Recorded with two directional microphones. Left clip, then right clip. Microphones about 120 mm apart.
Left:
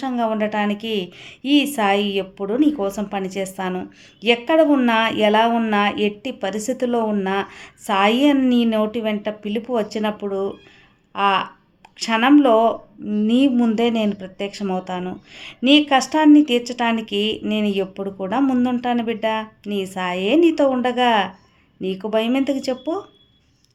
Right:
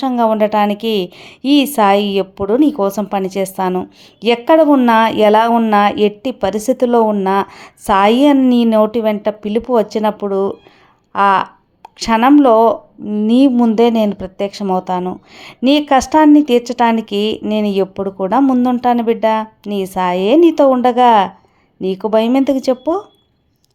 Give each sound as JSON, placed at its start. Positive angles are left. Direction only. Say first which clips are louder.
{"t": 0.0, "sound": "a woman's voice", "louder": "right 8 dB", "side_deg": -55}